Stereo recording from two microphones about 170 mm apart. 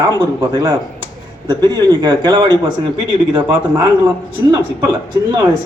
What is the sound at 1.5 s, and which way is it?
A man's voice, 25° right (ahead or behind).